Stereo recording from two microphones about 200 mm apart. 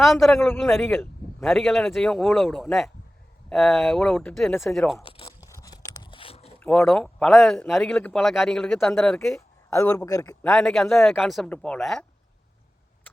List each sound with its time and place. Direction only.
0.0 s speech: centre (ahead or behind)
0.4 s a man's voice: 10° left (ahead or behind)
1.5 s speech: centre (ahead or behind)
5.0 s tearing: 30° left (ahead or behind)
5.4 s crunch: 15° left (ahead or behind)
6.6 s speech: 10° left (ahead or behind)
9.6 s a man's voice: 15° left (ahead or behind)
10.4 s speech: centre (ahead or behind)